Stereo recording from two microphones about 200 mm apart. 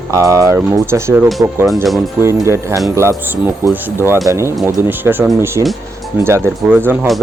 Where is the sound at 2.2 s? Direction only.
15° right (ahead or behind).